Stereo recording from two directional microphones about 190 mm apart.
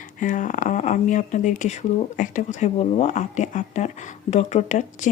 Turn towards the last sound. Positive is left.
turn(degrees=40)  # may be behind; listen again after turning